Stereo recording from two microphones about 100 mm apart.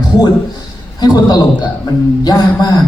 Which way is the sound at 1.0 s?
40° left (ahead or behind).